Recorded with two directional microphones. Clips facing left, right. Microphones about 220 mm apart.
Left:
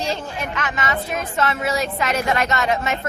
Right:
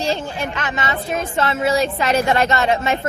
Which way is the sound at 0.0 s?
30° right (ahead or behind).